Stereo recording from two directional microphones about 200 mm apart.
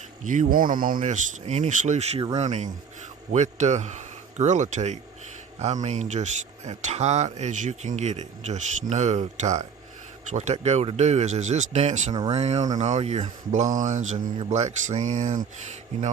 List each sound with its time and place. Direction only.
0.3 s speech: 40° right (ahead or behind)